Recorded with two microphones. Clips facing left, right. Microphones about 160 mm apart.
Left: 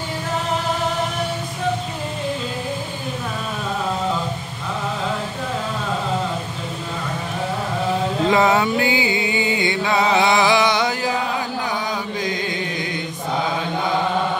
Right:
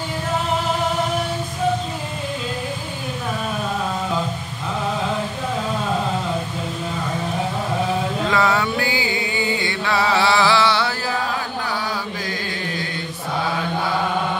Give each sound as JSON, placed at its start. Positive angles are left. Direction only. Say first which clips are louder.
{"t": 8.3, "sound": "music", "louder": "left 4 dB", "side_deg": 20}